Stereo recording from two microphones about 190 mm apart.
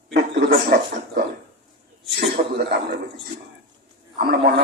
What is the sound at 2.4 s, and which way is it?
Speech, 45° right (ahead or behind).